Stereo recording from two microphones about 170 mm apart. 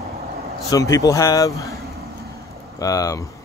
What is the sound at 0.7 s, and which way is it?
Speech, 20° left (ahead or behind).